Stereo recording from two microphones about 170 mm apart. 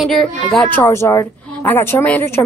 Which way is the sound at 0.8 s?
15° left (ahead or behind).